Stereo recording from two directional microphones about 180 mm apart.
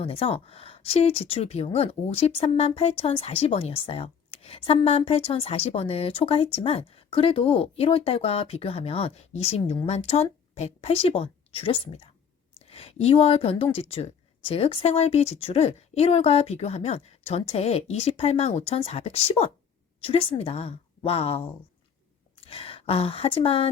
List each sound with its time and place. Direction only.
0.0 s a woman's voice: 30° left (ahead or behind)